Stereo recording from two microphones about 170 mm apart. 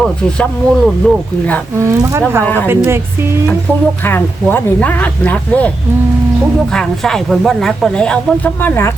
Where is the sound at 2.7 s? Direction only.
15° right (ahead or behind).